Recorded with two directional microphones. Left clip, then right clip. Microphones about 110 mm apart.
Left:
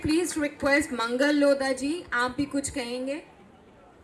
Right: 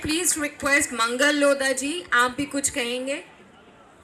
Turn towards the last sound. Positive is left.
turn(degrees=-20)  # may be behind; listen again after turning